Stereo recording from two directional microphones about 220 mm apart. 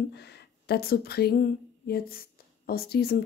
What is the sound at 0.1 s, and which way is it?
Speech, 50° left (ahead or behind).